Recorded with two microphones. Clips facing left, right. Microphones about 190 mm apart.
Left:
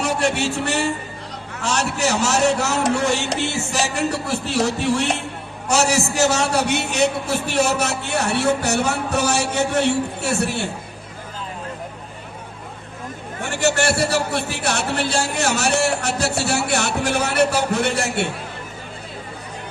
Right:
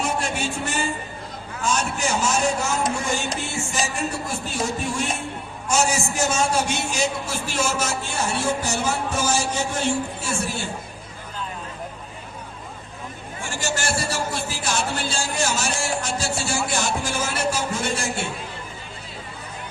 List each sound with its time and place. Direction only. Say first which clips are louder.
0.0 s a man's voice: left 5 dB; 70° left (ahead or behind)
13.4 s a man's voice: left 8 dB; 65° left (ahead or behind)